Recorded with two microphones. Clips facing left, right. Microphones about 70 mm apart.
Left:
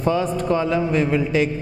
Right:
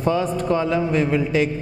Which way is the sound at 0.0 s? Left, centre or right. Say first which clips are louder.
Even; centre.